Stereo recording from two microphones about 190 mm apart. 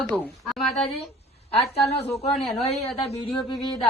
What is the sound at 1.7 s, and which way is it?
Speech, 35° left (ahead or behind).